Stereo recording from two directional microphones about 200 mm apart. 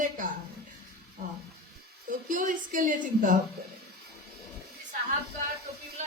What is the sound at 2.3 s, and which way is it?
A woman's voice, 40° right (ahead or behind).